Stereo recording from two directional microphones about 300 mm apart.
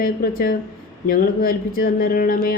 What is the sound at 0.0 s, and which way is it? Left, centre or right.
A man's voice, left.